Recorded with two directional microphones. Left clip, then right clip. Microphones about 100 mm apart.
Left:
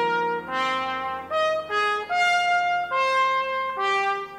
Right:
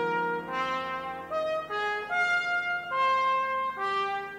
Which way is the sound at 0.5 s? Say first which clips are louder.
Left 6 dB; 20° left (ahead or behind).